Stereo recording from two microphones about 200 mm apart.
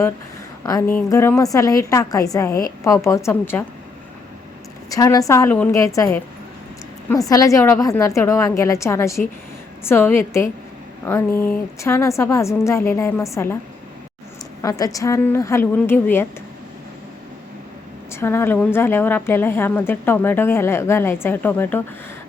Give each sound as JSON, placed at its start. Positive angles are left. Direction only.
{"t": 0.6, "sound": "a woman's voice", "side_deg": 15}
{"t": 4.9, "sound": "a woman's voice", "side_deg": 15}
{"t": 7.3, "sound": "a woman's voice", "side_deg": 15}
{"t": 14.6, "sound": "a woman's voice", "side_deg": 15}
{"t": 18.1, "sound": "a woman's voice", "side_deg": 10}